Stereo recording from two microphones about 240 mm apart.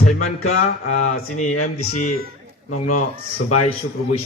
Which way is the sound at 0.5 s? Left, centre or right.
Left.